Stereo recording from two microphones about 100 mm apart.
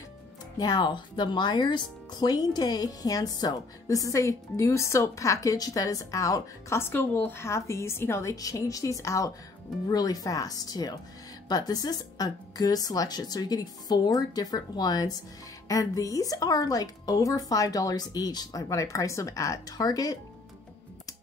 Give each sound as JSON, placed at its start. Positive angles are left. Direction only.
{"t": 0.6, "sound": "speech", "side_deg": 45}
{"t": 6.8, "sound": "a woman's voice", "side_deg": 20}